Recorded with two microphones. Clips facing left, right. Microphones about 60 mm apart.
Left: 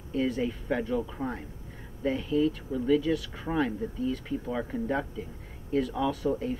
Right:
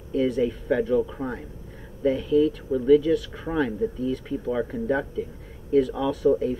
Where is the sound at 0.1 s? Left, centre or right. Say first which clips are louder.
Right 6 dB; centre.